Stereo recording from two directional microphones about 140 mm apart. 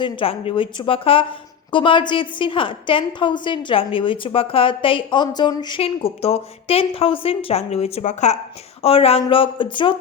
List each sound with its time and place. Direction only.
0.0 s a woman's voice: 40° left (ahead or behind)
8.8 s a woman's voice: 45° left (ahead or behind)